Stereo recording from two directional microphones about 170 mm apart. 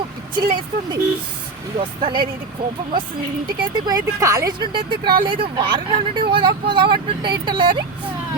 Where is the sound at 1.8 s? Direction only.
30° right (ahead or behind).